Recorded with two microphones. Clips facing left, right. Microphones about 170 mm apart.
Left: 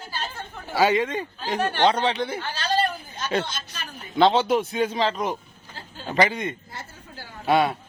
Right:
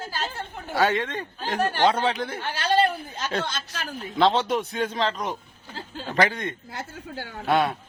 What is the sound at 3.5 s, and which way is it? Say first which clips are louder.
Speech: right 3 dB; 85° right.